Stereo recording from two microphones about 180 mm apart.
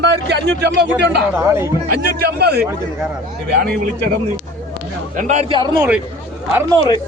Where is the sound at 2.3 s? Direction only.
65° right (ahead or behind).